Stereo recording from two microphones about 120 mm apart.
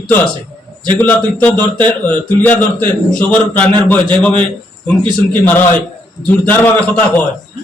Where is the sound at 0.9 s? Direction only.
15° left (ahead or behind).